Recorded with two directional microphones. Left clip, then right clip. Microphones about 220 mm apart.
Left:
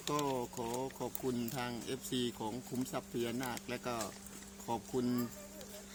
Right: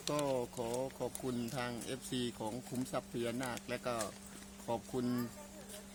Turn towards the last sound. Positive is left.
turn(degrees=0)  # may be behind; listen again after turning